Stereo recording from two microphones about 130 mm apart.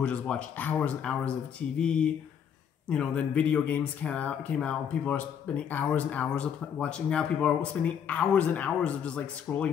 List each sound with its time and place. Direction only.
0.0 s speech: 10° left (ahead or behind)